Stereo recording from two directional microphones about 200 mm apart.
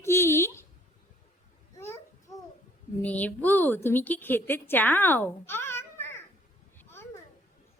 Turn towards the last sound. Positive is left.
turn(degrees=10)  # may be behind; listen again after turning